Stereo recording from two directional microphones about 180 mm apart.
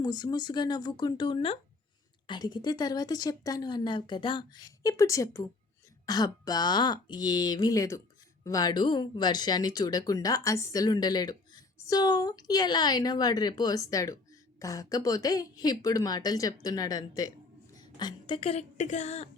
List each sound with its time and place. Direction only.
0.0 s speech: 20° left (ahead or behind)